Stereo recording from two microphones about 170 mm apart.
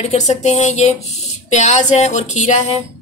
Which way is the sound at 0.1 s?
40° left (ahead or behind).